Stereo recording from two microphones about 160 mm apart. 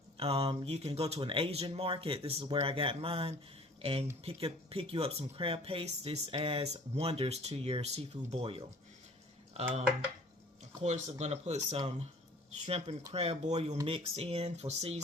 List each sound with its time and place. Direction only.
0.2 s speech: 35° right (ahead or behind)
10.8 s speech: 45° right (ahead or behind)